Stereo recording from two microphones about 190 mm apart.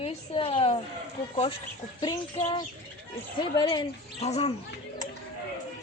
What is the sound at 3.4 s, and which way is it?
Speech, 25° left (ahead or behind).